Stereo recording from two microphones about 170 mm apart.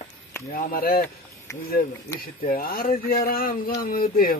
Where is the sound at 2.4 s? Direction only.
60° left (ahead or behind).